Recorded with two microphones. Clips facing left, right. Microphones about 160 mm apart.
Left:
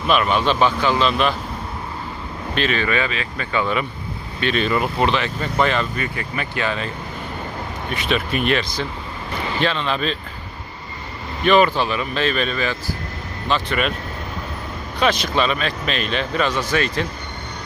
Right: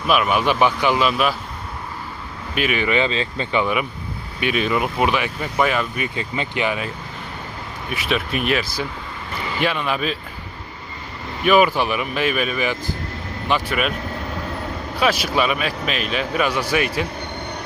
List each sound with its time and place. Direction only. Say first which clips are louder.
0.1 s speech: even; 5° right (ahead or behind)
2.6 s speech: right 1 dB; 15° right (ahead or behind)
6.1 s speech: right 2 dB; 20° right (ahead or behind)
11.4 s speech: even; 10° right (ahead or behind)
14.9 s speech: even; 5° right (ahead or behind)